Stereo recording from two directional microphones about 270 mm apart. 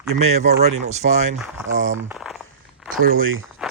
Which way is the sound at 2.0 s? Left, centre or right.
Centre.